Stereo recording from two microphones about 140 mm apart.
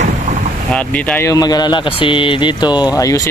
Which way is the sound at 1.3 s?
30° left (ahead or behind).